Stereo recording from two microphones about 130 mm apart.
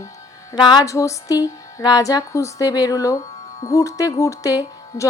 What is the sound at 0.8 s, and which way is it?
Speech, 25° left (ahead or behind).